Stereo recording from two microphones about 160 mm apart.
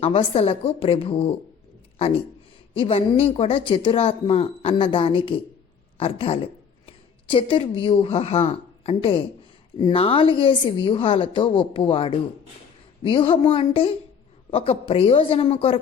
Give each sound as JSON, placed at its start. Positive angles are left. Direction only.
{"t": 0.0, "sound": "a woman's voice", "side_deg": 35}